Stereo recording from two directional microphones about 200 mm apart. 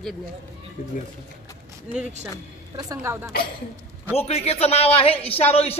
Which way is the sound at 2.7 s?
15° right (ahead or behind).